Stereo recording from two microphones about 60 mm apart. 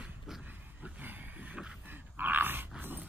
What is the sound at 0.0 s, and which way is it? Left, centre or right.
Dog, centre.